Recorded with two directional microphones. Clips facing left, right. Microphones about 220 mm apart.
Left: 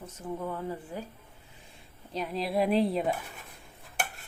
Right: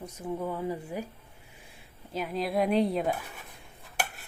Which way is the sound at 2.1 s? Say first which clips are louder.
Even; centre (ahead or behind).